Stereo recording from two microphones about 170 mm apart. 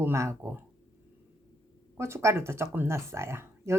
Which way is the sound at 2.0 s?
15° right (ahead or behind).